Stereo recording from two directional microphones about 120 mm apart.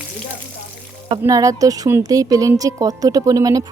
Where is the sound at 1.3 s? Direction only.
30° right (ahead or behind).